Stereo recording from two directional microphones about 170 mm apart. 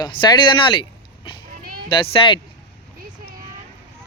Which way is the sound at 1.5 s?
60° right (ahead or behind).